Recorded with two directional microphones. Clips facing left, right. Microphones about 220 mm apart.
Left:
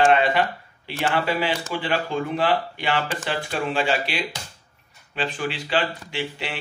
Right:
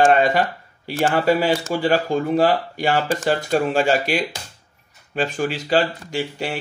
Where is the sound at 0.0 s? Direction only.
40° right (ahead or behind).